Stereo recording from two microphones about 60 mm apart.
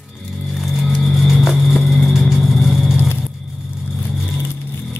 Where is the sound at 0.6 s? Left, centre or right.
Centre.